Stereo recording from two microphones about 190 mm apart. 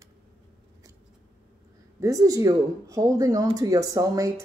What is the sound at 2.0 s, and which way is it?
Speech, 15° right (ahead or behind).